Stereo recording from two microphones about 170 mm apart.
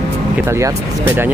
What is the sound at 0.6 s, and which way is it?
Speech, 15° right (ahead or behind).